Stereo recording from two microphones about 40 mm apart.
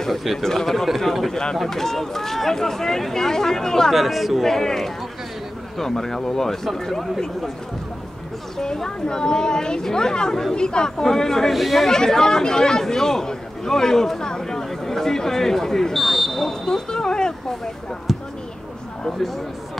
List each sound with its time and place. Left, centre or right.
0.1 s speech: centre
1.3 s speech: centre
3.9 s speech: centre
8.5 s speech: centre
11.5 s speech: centre
11.9 s speech: centre
18.1 s basketball bounce: centre
19.1 s speech: centre